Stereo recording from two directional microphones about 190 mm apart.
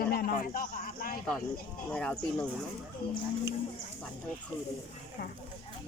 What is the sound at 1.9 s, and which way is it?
Speech, 5° left (ahead or behind).